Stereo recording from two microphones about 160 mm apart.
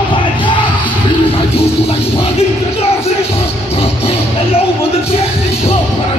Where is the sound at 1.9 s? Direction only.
40° left (ahead or behind).